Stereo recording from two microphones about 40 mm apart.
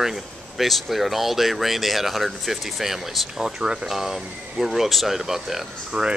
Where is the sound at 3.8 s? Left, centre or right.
Centre.